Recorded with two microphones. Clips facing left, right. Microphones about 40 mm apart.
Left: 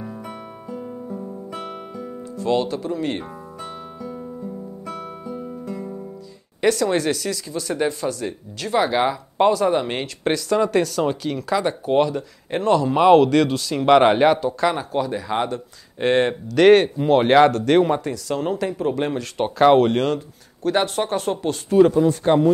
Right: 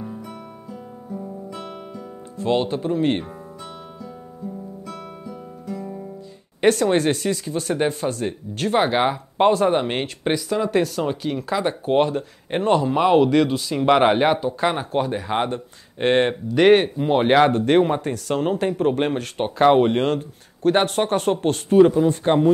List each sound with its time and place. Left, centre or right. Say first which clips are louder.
1.5 s guitar: left 2 dB; centre
2.3 s speech: even; right
4.8 s guitar: left 3 dB; left
6.6 s speech: right 2 dB; right
10.2 s speech: left 4 dB; centre
12.0 s speech: even; right
12.9 s speech: left 4 dB; centre
14.1 s speech: left 2 dB; centre
17.5 s speech: even; right
18.0 s speech: right 1 dB; right
19.4 s speech: left 1 dB; centre
20.0 s speech: even; right
22.0 s speech: left 1 dB; right